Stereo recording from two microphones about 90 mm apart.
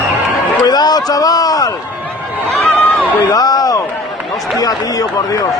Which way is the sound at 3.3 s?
45° left (ahead or behind).